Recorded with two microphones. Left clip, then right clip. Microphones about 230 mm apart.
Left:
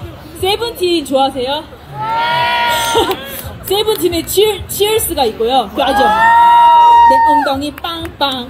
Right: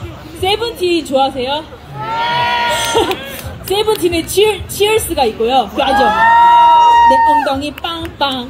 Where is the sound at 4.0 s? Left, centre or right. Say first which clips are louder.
Even; centre.